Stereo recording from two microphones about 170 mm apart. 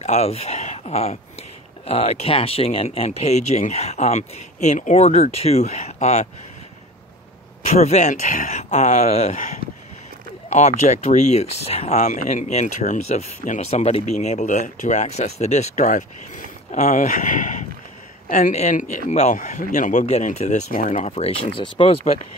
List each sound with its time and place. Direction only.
0.0 s speech: 40° left (ahead or behind)
7.6 s speech: 40° left (ahead or behind)